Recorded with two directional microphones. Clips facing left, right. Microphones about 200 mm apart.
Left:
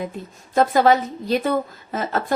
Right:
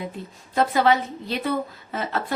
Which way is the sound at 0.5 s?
45° left (ahead or behind).